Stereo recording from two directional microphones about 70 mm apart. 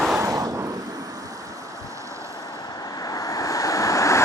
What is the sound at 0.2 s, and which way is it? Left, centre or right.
Vehicle, right.